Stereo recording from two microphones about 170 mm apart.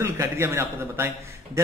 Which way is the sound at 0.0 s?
15° right (ahead or behind).